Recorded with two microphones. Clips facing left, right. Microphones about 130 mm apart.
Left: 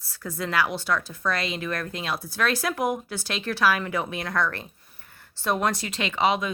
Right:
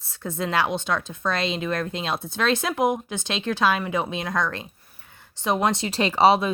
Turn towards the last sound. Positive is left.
turn(degrees=-35)  # may be behind; listen again after turning